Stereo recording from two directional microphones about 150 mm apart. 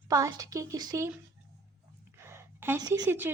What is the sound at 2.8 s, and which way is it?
Speech, 25° right (ahead or behind).